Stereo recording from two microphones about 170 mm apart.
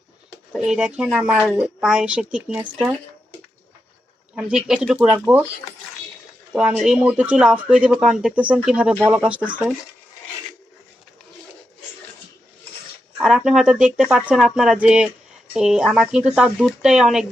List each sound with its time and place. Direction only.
0.5 s a woman's voice: 5° right (ahead or behind)
4.4 s speech: 5° right (ahead or behind)
6.5 s speech: 5° right (ahead or behind)
13.1 s a woman's voice: 5° right (ahead or behind)